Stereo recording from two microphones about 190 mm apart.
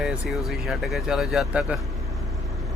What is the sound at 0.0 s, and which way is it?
Speech, centre (ahead or behind).